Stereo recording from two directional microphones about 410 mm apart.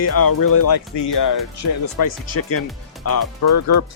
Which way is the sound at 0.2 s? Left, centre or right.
Left.